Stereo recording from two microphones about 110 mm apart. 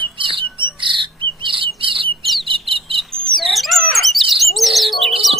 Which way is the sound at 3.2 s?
Centre (ahead or behind).